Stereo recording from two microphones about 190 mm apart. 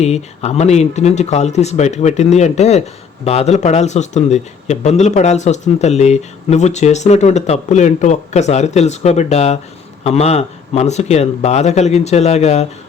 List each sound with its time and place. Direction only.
0.0 s speech: 35° left (ahead or behind)